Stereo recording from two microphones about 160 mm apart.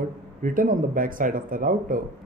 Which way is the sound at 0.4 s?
55° right (ahead or behind).